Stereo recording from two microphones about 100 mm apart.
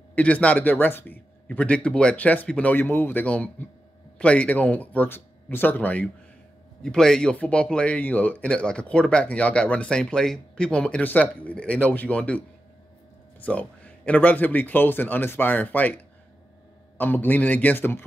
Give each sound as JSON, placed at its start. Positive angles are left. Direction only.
{"t": 0.1, "sound": "speech", "side_deg": 15}
{"t": 17.0, "sound": "a man's voice", "side_deg": 20}